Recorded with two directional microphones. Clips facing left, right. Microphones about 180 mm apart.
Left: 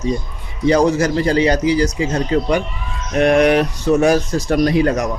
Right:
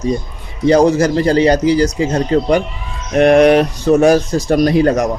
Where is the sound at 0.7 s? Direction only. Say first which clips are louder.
Right 4 dB; 35° right (ahead or behind).